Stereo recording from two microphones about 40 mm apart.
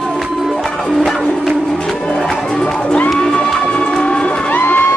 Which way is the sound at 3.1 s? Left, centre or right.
Left.